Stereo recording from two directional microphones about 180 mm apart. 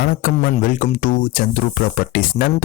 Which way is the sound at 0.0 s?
50° left (ahead or behind).